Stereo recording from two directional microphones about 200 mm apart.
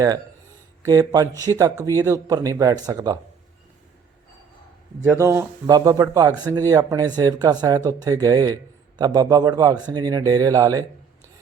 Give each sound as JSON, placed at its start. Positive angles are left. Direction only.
{"t": 0.8, "sound": "speech", "side_deg": -15}
{"t": 5.1, "sound": "a man's voice", "side_deg": -15}